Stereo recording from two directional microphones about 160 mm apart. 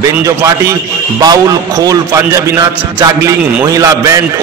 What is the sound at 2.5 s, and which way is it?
A man's voice, 15° right (ahead or behind).